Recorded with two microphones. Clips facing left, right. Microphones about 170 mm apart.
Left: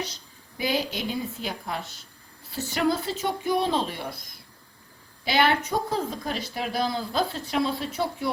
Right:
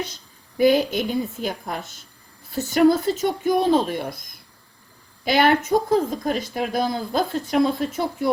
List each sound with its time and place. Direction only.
0.5 s speech: 50° right (ahead or behind)
5.2 s speech: 50° right (ahead or behind)